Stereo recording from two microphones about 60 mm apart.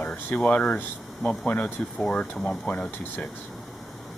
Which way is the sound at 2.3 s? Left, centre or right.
Centre.